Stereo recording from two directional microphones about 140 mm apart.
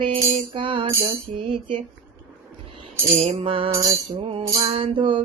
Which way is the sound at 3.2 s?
45° right (ahead or behind).